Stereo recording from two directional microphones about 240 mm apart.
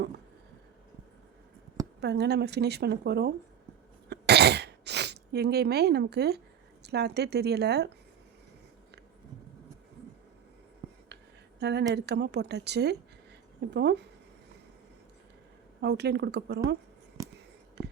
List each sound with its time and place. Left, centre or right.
2.0 s a woman's voice: right
4.1 s throat clearing: right
6.8 s a woman's voice: right
11.6 s a woman's voice: right
15.8 s a woman's voice: right
17.8 s whispering: right